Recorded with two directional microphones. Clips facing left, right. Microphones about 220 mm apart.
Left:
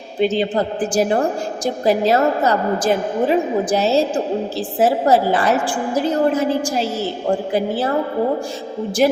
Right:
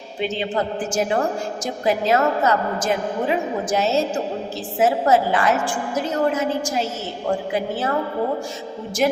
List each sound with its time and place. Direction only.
0.2 s a woman's voice: 35° left (ahead or behind)